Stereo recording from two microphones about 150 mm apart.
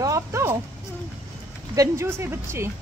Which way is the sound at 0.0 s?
20° right (ahead or behind).